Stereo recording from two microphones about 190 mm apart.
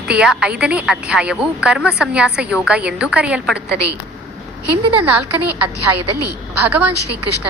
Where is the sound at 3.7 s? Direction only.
60° right (ahead or behind).